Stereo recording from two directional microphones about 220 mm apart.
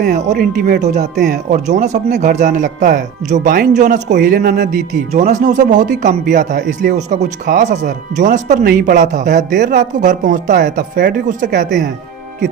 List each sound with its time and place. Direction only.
0.0 s speech: 40° right (ahead or behind)
4.1 s speech: 45° right (ahead or behind)